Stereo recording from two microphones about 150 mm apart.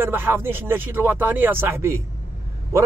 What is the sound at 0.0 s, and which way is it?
Speech, 15° right (ahead or behind).